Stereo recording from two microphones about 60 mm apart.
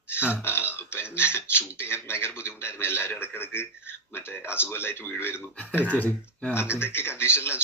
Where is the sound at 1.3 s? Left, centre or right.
Left.